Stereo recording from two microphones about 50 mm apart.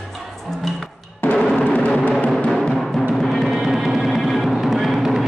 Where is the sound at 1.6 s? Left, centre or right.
Left.